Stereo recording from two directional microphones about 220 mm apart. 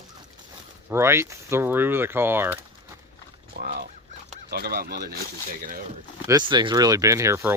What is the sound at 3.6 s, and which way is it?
Speech, 45° right (ahead or behind).